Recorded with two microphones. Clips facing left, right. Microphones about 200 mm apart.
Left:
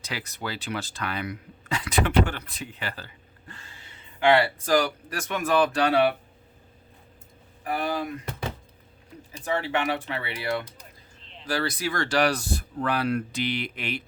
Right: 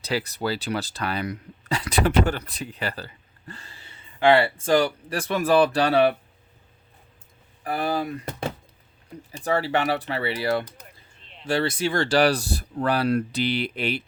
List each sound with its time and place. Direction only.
0.0 s speech: 35° right (ahead or behind)
4.2 s speech: 30° right (ahead or behind)
7.6 s speech: 35° right (ahead or behind)
8.2 s a sound: 50° right (ahead or behind)
9.4 s speech: 35° right (ahead or behind)